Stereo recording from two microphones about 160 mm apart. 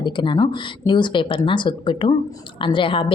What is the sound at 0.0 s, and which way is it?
A woman's voice, 30° left (ahead or behind).